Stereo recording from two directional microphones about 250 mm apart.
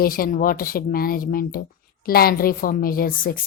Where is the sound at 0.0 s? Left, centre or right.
Left.